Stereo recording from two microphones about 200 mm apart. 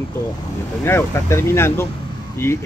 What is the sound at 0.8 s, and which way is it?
Speech, 15° left (ahead or behind).